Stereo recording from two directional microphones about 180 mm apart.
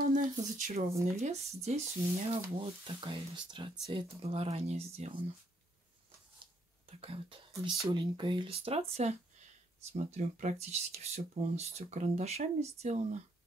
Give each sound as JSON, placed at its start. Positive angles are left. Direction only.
{"t": 0.0, "sound": "speech", "side_deg": -45}
{"t": 7.0, "sound": "speech", "side_deg": -30}